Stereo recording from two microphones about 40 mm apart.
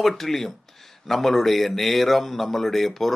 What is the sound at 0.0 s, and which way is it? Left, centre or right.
Speech, centre.